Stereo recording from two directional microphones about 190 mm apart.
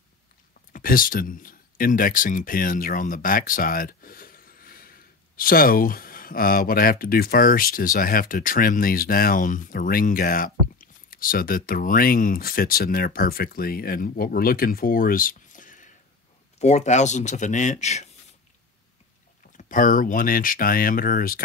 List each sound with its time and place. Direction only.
0.7 s speech: 45° left (ahead or behind)
19.5 s speech: 45° left (ahead or behind)